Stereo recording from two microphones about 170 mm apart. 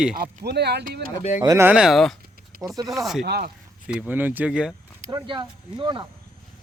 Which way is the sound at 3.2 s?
70° right (ahead or behind).